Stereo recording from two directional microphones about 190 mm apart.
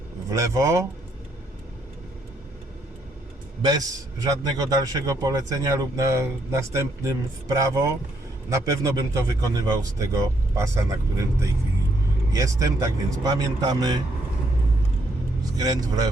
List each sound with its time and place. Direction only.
0.3 s speech: 15° right (ahead or behind)
4.2 s speech: 20° right (ahead or behind)
15.5 s speech: 20° right (ahead or behind)